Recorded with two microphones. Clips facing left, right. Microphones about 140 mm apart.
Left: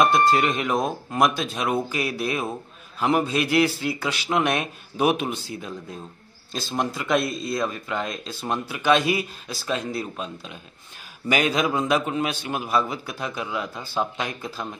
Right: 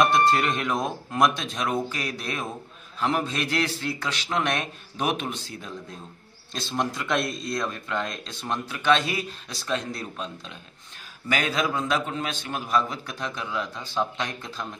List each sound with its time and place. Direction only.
0.0 s a man's voice: centre (ahead or behind)